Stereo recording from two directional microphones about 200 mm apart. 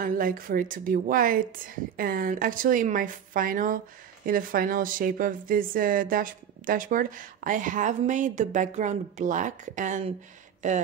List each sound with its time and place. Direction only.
0.0 s a woman's voice: 45° right (ahead or behind)